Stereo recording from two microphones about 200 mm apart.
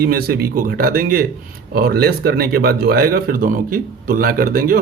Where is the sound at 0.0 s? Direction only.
50° right (ahead or behind).